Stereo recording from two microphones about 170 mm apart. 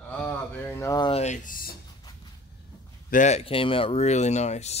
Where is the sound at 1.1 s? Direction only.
45° left (ahead or behind).